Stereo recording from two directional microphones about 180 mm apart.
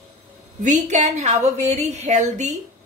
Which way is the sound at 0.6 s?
40° right (ahead or behind).